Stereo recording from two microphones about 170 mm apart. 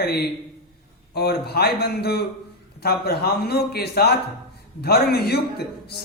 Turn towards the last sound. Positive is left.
turn(degrees=70)  # may be behind; listen again after turning